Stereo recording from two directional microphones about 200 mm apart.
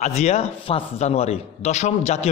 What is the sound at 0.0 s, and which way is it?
A man's voice, 35° left (ahead or behind).